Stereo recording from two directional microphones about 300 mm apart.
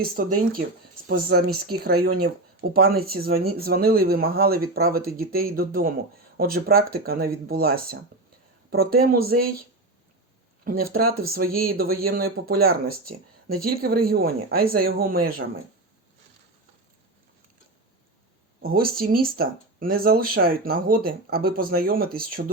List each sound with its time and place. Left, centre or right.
0.0 s speech: right
10.6 s speech: right
18.6 s speech: right